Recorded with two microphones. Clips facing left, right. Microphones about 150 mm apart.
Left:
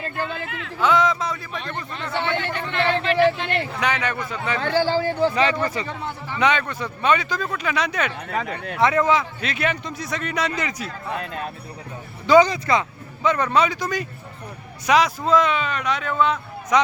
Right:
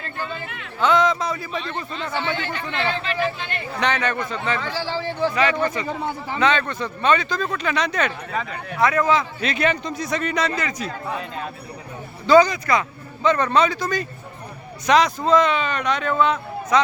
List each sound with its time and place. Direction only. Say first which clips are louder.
0.3 s speech: left 2 dB; 90° left
0.8 s a man's voice: right 1 dB; 5° left (ahead or behind)
1.6 s speech: right 2 dB; 60° left (ahead or behind)
3.8 s speech: right 2 dB; 10° left (ahead or behind)
4.6 s speech: left 6 dB; 55° left (ahead or behind)
5.2 s a man's voice: right 1 dB; 30° left (ahead or behind)
6.4 s speech: even; 10° left (ahead or behind)
8.8 s speech: even; 25° left (ahead or behind)
9.4 s speech: right 3 dB; 5° left (ahead or behind)
10.4 s speech: right 1 dB; 15° left (ahead or behind)
12.2 s speech: even; 15° left (ahead or behind)
13.2 s speech: right 1 dB; 10° left (ahead or behind)
16.7 s speech: even; 15° left (ahead or behind)